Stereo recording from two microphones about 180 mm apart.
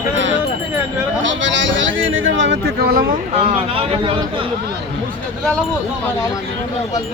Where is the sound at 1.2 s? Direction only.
90° right; by 3.0 s 60° right (ahead or behind).